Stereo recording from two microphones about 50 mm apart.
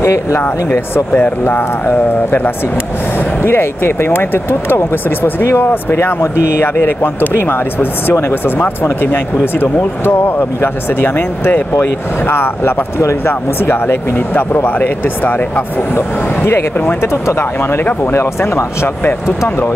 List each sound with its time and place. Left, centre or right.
0.0 s speech: left
1.1 s speech: left
3.4 s speech: left
14.1 s speech: left
16.4 s speech: left